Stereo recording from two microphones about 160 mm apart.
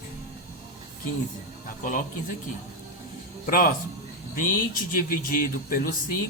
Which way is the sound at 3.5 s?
60° left (ahead or behind).